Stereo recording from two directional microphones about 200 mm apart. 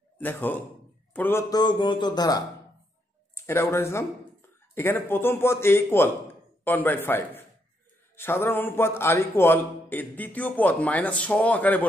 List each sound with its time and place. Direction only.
0.2 s a man's voice: 10° left (ahead or behind)